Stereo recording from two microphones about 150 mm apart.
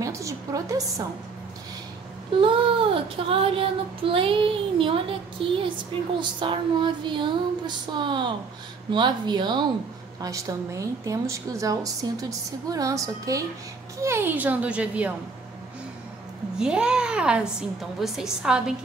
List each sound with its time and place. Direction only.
0.0 s a sound: 20° right (ahead or behind)
2.4 s child singing: 35° right (ahead or behind)
10.2 s a woman's voice: 20° right (ahead or behind)
16.5 s a woman's voice: 5° right (ahead or behind)